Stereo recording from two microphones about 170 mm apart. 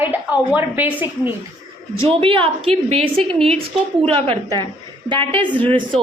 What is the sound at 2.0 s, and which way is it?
A woman's voice, 35° right (ahead or behind).